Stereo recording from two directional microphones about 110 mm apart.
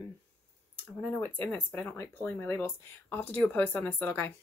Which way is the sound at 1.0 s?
15° left (ahead or behind).